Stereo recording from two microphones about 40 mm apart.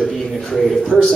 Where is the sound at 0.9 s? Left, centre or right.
Left.